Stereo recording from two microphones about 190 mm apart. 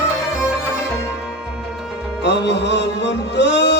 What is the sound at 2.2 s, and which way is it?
Music, 65° left (ahead or behind).